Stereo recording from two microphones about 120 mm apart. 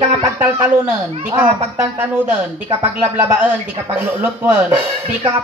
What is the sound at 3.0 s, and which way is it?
Speech, 15° right (ahead or behind).